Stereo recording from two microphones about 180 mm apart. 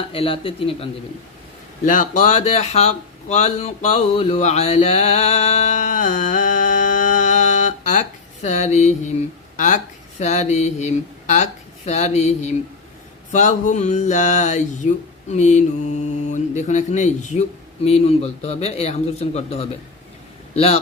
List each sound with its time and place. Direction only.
0.1 s speech: 30° left (ahead or behind)
1.8 s speech: 45° left (ahead or behind)